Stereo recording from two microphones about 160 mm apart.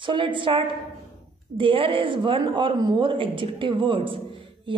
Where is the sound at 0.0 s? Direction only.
30° right (ahead or behind).